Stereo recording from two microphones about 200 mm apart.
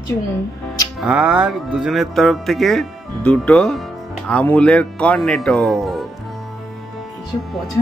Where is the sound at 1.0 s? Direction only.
5° right (ahead or behind).